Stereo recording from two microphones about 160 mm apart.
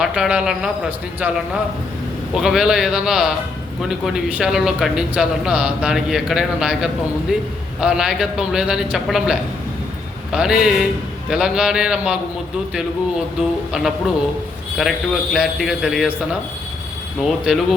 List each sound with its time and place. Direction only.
0.0 s speech: 5° right (ahead or behind)
2.3 s speech: centre (ahead or behind)
13.7 s speech: 5° right (ahead or behind)